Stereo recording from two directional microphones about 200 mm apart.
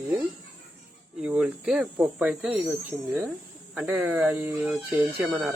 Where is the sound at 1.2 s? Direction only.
5° right (ahead or behind).